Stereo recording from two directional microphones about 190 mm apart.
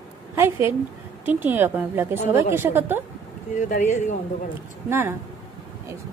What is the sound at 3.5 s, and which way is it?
Speech, 45° left (ahead or behind).